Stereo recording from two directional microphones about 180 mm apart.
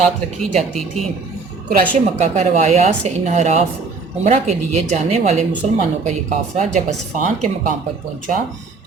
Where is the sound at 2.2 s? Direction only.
40° right (ahead or behind).